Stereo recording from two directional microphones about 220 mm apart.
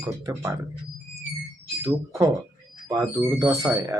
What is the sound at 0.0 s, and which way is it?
Speech, 15° right (ahead or behind).